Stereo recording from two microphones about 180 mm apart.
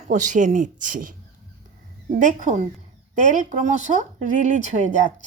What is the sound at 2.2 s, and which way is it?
Speech, 45° right (ahead or behind).